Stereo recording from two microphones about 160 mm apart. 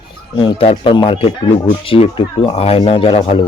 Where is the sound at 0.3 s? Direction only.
35° left (ahead or behind).